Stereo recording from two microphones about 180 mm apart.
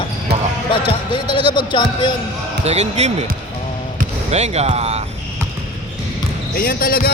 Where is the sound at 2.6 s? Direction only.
40° right (ahead or behind).